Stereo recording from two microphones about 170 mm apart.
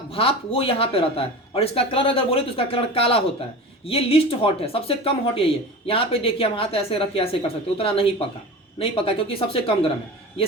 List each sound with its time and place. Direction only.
0.1 s speech: 30° left (ahead or behind)